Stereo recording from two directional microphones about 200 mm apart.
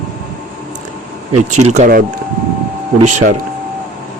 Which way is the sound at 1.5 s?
35° right (ahead or behind).